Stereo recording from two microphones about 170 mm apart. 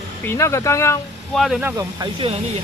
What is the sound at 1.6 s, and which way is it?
Speech, 20° right (ahead or behind).